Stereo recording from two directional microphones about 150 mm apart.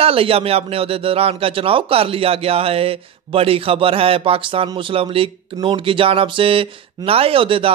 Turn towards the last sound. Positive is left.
turn(degrees=-35)  # may be behind; listen again after turning